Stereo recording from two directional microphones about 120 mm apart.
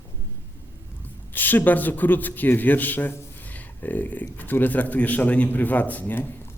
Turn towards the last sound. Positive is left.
turn(degrees=15)  # may be behind; listen again after turning